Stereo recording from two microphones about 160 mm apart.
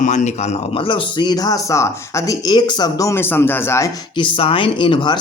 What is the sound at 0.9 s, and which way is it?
Speech, 30° left (ahead or behind).